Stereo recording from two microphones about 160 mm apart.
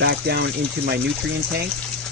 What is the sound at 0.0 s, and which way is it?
Speech, 90° right.